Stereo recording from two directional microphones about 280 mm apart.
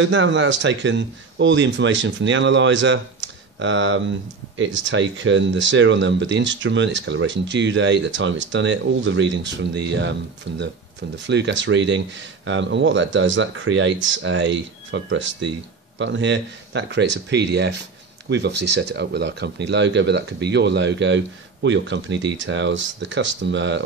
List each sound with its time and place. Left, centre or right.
0.0 s speech: right